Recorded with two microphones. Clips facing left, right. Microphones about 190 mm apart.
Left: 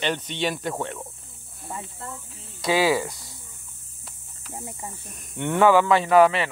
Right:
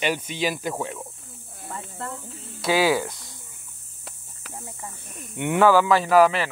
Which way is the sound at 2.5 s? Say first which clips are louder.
Even; centre (ahead or behind).